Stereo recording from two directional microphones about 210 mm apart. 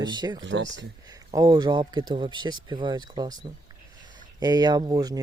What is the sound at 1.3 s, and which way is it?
Speech, 20° right (ahead or behind).